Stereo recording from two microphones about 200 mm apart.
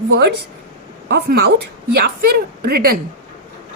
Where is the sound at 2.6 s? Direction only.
50° right (ahead or behind).